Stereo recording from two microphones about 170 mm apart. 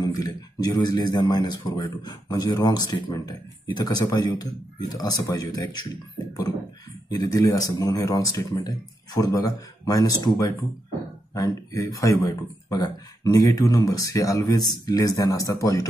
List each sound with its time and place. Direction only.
0.0 s speech: 25° left (ahead or behind)
7.2 s speech: 20° left (ahead or behind)
11.3 s speech: 20° left (ahead or behind)